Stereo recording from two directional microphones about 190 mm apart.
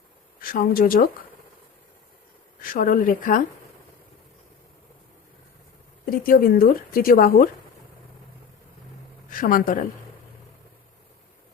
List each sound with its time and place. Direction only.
0.3 s speech: 50° left (ahead or behind)
2.6 s a woman's voice: 45° left (ahead or behind)
6.1 s a woman's voice: 50° left (ahead or behind)
9.3 s speech: 45° left (ahead or behind)